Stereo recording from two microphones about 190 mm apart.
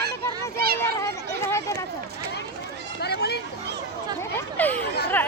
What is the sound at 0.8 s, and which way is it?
Children playing, 15° left (ahead or behind).